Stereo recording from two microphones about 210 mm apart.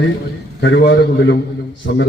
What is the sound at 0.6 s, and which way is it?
Speech, 55° left (ahead or behind).